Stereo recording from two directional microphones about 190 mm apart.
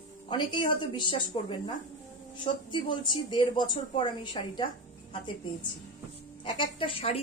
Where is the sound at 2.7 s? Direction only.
25° left (ahead or behind).